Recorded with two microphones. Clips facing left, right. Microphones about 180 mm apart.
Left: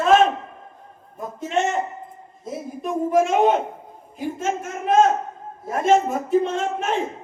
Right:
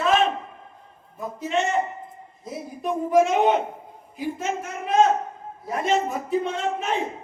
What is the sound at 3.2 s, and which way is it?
Speech, 50° left (ahead or behind).